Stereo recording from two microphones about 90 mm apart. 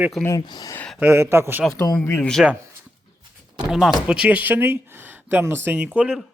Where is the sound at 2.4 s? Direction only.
5° right (ahead or behind).